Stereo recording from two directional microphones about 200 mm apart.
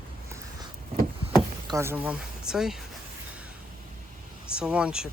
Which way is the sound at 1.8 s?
10° right (ahead or behind).